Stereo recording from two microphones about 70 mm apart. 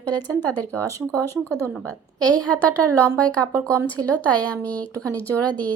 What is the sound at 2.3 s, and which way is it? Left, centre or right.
A woman's voice, centre.